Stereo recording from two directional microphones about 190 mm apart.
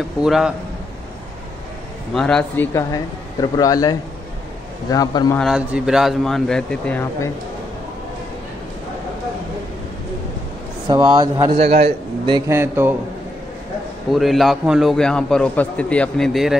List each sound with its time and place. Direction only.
0.2 s a man's voice: 5° right (ahead or behind)
2.1 s a man's voice: 5° left (ahead or behind); by 5.4 s 20° left (ahead or behind)
5.4 s a man's voice: centre (ahead or behind)
10.9 s speech: 20° right (ahead or behind)
12.4 s speech: 10° right (ahead or behind)
14.1 s a man's voice: centre (ahead or behind)